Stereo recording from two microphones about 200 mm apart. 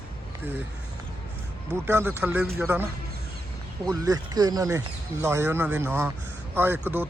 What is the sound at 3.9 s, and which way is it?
A man's voice, 15° right (ahead or behind).